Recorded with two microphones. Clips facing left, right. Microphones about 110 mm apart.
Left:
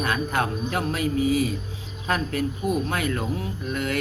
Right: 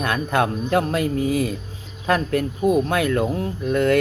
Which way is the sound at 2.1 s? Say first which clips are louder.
Right 5 dB; 55° right (ahead or behind).